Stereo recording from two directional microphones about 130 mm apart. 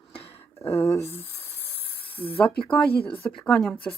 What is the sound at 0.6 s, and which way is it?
Speech, 20° left (ahead or behind).